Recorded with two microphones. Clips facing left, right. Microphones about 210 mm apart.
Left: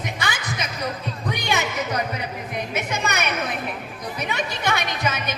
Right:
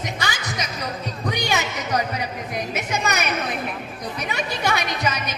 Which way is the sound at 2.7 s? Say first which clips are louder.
Even; 60° left (ahead or behind).